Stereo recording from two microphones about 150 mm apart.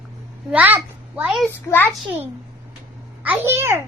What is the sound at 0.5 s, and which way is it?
Speech, 10° right (ahead or behind).